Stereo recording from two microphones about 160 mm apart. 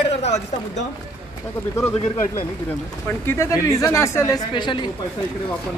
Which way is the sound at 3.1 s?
15° left (ahead or behind).